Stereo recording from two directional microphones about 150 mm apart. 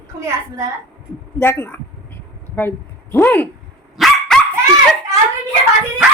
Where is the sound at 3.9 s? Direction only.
Centre (ahead or behind).